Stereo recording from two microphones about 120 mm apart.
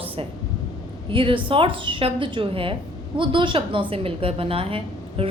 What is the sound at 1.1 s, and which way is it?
A woman's voice, 45° right (ahead or behind).